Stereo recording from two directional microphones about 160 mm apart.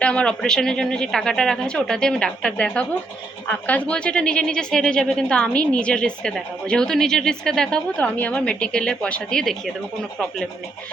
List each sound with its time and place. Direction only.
0.0 s speech: 5° left (ahead or behind)